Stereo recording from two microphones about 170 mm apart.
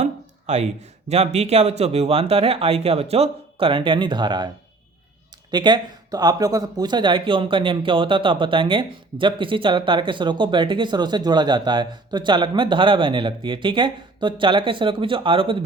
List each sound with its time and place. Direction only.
0.0 s speech: 40° right (ahead or behind)
5.5 s speech: 25° right (ahead or behind)